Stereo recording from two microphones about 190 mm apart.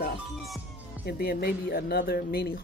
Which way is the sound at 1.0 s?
55° left (ahead or behind).